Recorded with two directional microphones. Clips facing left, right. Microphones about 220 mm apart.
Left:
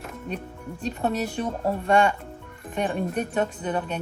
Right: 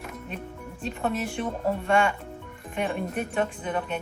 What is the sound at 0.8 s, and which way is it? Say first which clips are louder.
Speech: left 2 dB; 40° left (ahead or behind).